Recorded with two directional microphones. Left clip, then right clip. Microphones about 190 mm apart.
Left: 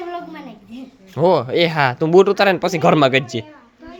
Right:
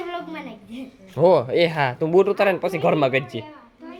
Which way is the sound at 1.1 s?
15° left (ahead or behind).